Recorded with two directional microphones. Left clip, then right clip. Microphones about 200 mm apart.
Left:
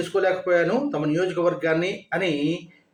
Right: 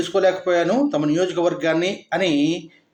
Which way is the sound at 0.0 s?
40° right (ahead or behind).